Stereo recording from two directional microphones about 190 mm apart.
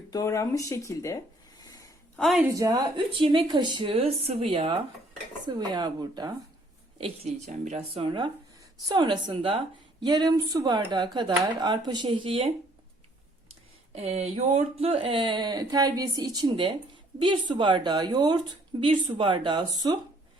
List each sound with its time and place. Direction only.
0.1 s speech: 15° left (ahead or behind)
1.6 s a sound: 20° left (ahead or behind)
2.1 s a woman's voice: centre (ahead or behind)
2.6 s speech: 20° right (ahead or behind)
7.0 s speech: 35° right (ahead or behind)
8.0 s speech: 25° right (ahead or behind)
13.9 s speech: 35° right (ahead or behind)